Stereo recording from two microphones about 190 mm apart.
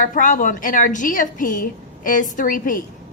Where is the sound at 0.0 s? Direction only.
45° left (ahead or behind).